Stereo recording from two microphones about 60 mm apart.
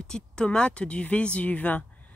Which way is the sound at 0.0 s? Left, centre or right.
Centre.